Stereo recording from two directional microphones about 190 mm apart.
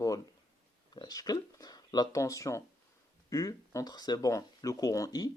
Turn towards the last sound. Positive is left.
turn(degrees=20)  # may be behind; listen again after turning